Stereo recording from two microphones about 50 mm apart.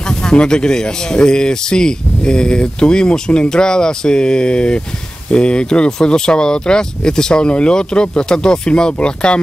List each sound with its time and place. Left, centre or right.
0.1 s speech: centre